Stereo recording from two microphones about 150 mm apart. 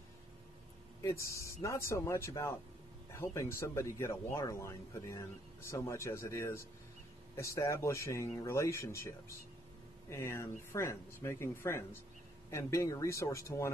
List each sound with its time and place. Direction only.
1.0 s speech: 20° left (ahead or behind)